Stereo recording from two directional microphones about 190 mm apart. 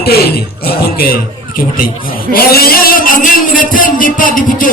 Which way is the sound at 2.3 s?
50° left (ahead or behind).